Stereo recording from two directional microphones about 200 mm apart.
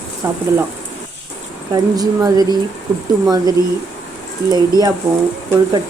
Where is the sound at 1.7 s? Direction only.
20° right (ahead or behind).